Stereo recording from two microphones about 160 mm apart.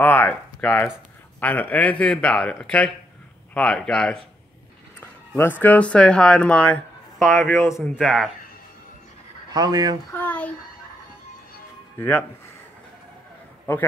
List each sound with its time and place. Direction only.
0.0 s speech: 15° left (ahead or behind)
7.5 s speech: 15° left (ahead or behind)
8.0 s speech: centre (ahead or behind)
9.5 s speech: 25° right (ahead or behind)
10.1 s speech: 10° left (ahead or behind)
12.0 s speech: 10° left (ahead or behind)
13.7 s speech: 15° left (ahead or behind)